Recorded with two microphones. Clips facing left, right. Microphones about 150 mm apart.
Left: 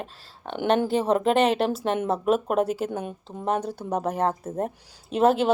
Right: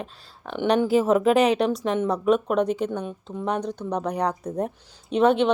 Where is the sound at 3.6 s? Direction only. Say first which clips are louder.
Even; 5° left (ahead or behind).